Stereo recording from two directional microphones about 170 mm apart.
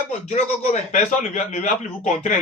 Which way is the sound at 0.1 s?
45° left (ahead or behind).